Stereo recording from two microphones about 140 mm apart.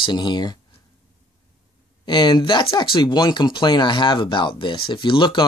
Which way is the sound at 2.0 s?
30° left (ahead or behind).